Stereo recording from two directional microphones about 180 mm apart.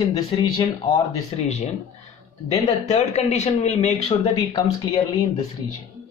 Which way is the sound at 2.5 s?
40° left (ahead or behind).